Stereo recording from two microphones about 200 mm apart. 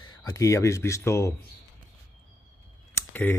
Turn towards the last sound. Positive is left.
turn(degrees=10)  # may be behind; listen again after turning